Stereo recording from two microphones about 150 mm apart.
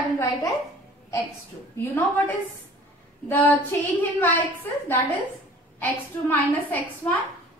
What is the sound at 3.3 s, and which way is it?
A woman's voice, 10° left (ahead or behind).